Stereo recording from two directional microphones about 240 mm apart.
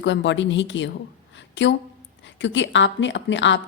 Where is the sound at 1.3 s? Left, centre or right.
Left.